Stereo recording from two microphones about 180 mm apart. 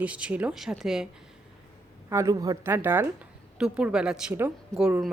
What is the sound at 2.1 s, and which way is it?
A woman's voice, 20° right (ahead or behind).